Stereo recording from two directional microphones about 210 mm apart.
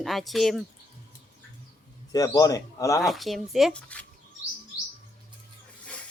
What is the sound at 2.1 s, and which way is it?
Speech, 15° left (ahead or behind).